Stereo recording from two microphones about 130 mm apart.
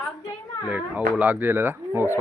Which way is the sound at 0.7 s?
10° right (ahead or behind).